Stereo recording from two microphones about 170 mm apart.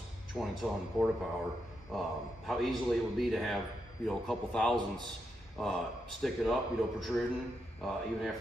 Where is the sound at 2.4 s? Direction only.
Centre (ahead or behind).